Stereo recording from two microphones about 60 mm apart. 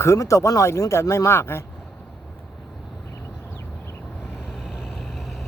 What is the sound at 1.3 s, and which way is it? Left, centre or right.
Speech, left.